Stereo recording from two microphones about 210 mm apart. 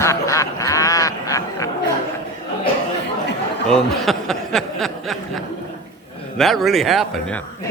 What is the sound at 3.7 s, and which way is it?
Speech, centre (ahead or behind).